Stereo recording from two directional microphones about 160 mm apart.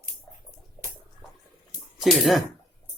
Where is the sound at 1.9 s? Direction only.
Centre (ahead or behind).